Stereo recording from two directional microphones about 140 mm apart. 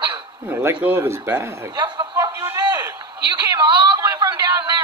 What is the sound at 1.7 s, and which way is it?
Speech, 30° right (ahead or behind).